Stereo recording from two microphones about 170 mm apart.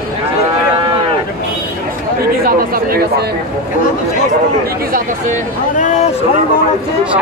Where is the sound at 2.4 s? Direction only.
60° right (ahead or behind).